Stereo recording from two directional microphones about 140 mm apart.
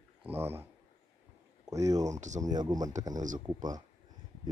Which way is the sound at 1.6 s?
25° right (ahead or behind).